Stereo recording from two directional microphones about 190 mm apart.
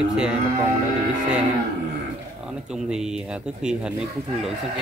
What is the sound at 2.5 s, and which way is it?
Speech, 5° right (ahead or behind).